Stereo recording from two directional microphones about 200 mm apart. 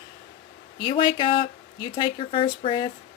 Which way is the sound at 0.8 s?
25° left (ahead or behind).